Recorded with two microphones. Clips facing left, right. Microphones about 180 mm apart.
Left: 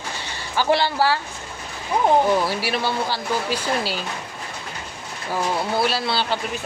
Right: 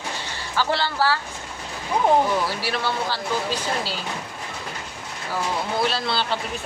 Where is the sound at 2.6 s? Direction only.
15° left (ahead or behind).